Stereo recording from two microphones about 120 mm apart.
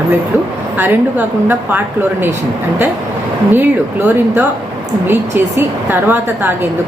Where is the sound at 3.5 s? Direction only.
15° right (ahead or behind).